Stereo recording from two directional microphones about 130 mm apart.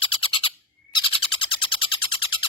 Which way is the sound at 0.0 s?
45° left (ahead or behind).